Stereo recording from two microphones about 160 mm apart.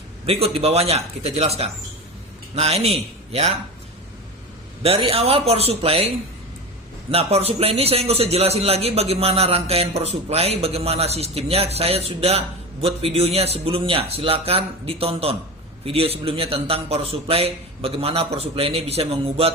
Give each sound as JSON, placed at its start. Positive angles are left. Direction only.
{"t": 0.3, "sound": "a man's voice", "side_deg": -40}
{"t": 4.8, "sound": "a man's voice", "side_deg": -35}
{"t": 7.1, "sound": "a man's voice", "side_deg": -40}